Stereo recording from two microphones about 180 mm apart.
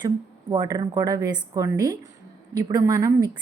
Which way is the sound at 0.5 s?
20° right (ahead or behind).